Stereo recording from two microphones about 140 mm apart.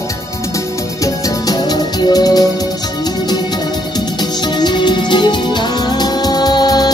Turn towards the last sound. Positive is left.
turn(degrees=30)  # may be behind; listen again after turning